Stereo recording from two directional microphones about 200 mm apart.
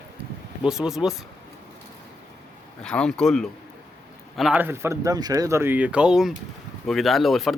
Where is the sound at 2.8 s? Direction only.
5° left (ahead or behind).